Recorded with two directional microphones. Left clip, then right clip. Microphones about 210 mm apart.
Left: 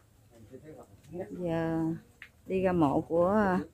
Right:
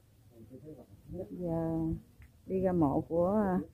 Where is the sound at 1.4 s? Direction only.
20° left (ahead or behind).